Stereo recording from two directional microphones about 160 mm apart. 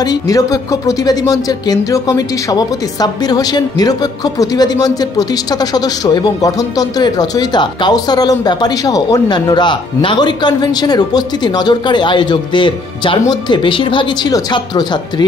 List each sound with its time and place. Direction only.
0.0 s speech: 25° left (ahead or behind)